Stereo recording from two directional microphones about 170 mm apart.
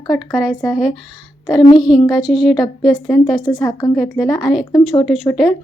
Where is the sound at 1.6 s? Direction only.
25° left (ahead or behind).